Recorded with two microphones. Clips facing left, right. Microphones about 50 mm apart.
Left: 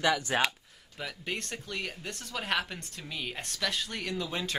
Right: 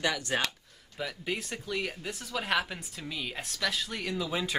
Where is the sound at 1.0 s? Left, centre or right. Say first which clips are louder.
Right 2 dB; centre.